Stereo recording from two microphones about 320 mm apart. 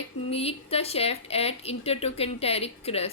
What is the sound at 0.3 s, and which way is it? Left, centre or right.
Speech, centre.